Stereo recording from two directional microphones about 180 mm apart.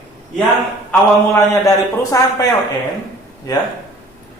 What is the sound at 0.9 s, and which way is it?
A man's voice, 15° left (ahead or behind).